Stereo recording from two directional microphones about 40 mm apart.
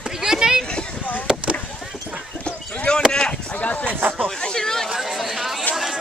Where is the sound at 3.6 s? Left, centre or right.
Left.